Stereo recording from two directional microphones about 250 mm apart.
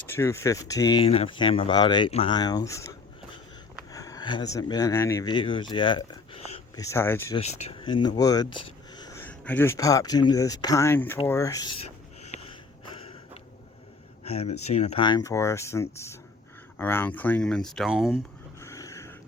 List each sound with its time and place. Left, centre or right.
0.0 s speech: centre
3.9 s speech: centre
5.7 s a sound: centre
6.9 s speech: centre
7.3 s speech: left
12.2 s a sound: left
14.3 s speech: left; by 18.2 s centre
18.6 s dog: centre